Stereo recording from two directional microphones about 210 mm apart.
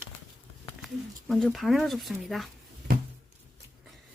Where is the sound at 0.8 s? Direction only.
Centre (ahead or behind).